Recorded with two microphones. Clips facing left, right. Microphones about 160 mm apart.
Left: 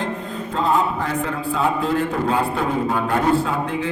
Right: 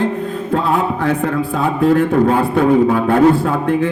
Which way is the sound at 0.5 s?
65° right (ahead or behind).